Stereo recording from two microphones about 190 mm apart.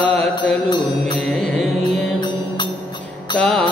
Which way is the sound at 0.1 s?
5° left (ahead or behind).